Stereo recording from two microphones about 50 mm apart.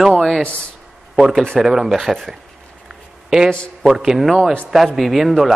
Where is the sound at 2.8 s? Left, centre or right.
Centre.